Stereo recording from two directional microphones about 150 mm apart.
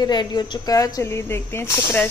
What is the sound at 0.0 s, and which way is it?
Speech, 30° left (ahead or behind).